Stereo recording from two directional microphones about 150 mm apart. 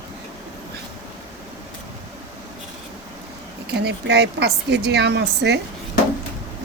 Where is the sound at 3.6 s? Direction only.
90° right.